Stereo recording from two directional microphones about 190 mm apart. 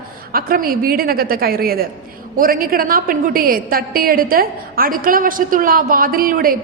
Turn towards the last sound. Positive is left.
turn(degrees=-50)  # may be behind; listen again after turning